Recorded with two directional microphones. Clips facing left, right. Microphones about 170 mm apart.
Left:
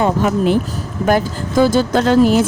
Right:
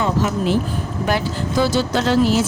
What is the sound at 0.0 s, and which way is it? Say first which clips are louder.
Speech: left 4 dB; 55° left (ahead or behind).